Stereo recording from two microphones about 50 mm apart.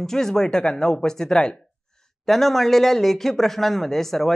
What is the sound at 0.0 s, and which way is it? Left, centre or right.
Speech, centre.